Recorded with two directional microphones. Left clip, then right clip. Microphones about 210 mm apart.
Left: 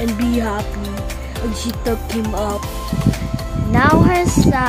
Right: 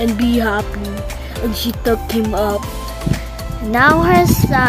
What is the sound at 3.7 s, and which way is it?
Speech, 25° right (ahead or behind).